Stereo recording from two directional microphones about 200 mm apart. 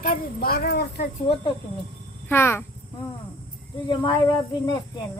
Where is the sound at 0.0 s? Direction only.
45° left (ahead or behind).